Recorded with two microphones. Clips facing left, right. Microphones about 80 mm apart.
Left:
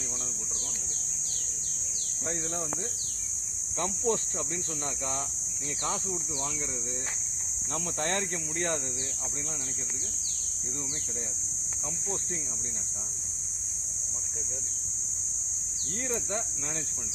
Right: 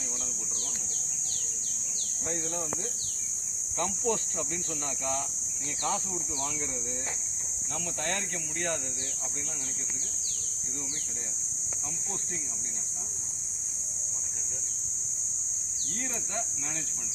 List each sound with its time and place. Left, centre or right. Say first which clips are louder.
3.8 s speech: left 1 dB; left
8.0 s speech: left 4 dB; left